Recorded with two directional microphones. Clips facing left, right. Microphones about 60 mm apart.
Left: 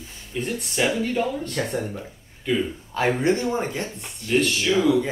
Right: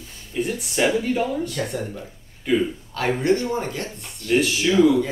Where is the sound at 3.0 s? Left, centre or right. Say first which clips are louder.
Even; centre.